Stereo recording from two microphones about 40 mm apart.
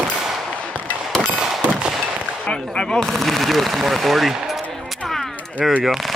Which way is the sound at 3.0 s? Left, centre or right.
Centre.